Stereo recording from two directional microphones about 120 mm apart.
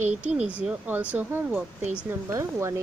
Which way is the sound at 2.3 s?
25° right (ahead or behind).